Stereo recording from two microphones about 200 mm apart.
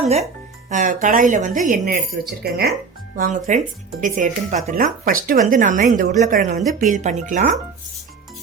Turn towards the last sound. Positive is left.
turn(degrees=-40)  # may be behind; listen again after turning